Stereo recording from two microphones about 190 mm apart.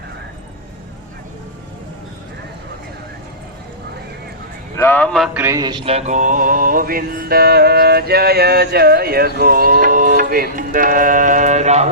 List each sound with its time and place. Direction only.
4.8 s speech: 10° left (ahead or behind)
5.4 s mantra: 15° right (ahead or behind); by 11.9 s 35° right (ahead or behind)